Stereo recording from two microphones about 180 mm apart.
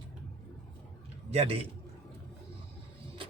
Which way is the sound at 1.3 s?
35° right (ahead or behind).